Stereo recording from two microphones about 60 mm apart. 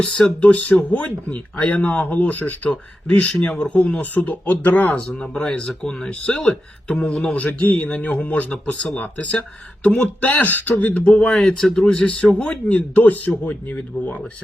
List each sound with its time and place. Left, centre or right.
0.2 s speech: centre
4.9 s speech: centre
11.3 s speech: centre; by 14.2 s left